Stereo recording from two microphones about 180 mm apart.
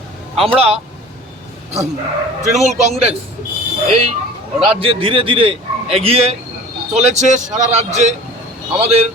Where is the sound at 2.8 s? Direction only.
35° right (ahead or behind).